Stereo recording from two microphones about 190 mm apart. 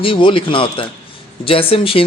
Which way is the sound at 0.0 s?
25° left (ahead or behind).